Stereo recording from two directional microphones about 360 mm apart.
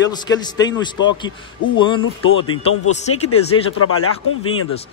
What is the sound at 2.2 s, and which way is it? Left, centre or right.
Speech, left.